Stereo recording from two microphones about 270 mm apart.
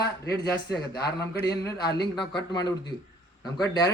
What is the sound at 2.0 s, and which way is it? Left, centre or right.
A man's voice, centre.